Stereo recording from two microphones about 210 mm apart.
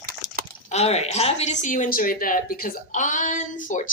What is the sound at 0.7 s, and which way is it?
A woman's voice, 30° left (ahead or behind).